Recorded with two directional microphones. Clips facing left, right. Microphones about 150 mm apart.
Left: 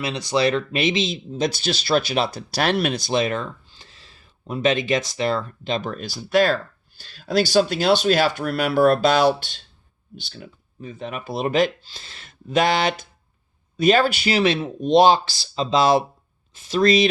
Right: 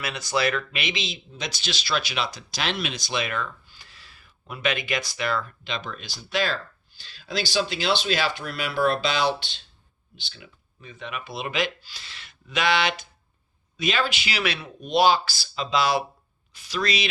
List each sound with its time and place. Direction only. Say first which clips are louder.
0.0 s speech: left 5 dB; 25° left (ahead or behind)
1.8 s speech: left 7 dB; 50° left (ahead or behind)
3.0 s speech: left 7 dB; 35° left (ahead or behind)
14.9 s speech: left 5 dB; 30° left (ahead or behind)
16.8 s speech: left 11 dB; 45° left (ahead or behind)